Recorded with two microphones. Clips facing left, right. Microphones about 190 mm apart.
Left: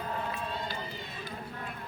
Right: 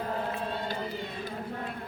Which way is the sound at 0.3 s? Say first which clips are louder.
Right 3 dB; 50° right (ahead or behind).